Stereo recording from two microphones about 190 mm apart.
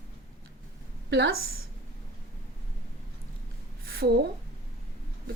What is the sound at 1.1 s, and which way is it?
Speech, 65° right (ahead or behind).